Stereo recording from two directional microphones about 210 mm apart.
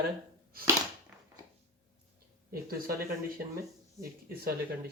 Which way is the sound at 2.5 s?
45° right (ahead or behind).